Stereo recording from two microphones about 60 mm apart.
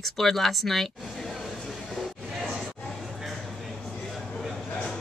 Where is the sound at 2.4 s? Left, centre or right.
Centre.